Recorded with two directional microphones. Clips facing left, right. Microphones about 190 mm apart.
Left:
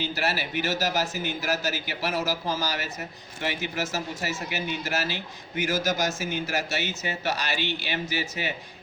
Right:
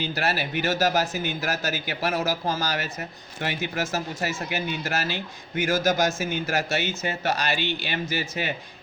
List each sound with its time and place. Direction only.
0.0 s speech: 55° right (ahead or behind)